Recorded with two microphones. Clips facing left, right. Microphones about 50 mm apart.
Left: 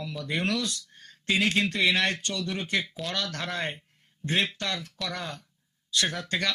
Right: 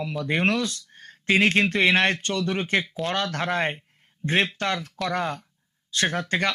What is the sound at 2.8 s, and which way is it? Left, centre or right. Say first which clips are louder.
Speech: right 5 dB; right.